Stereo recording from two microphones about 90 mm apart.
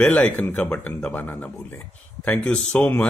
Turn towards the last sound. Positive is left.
turn(degrees=20)  # may be behind; listen again after turning